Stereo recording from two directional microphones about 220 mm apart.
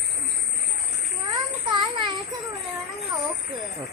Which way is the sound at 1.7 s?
20° right (ahead or behind).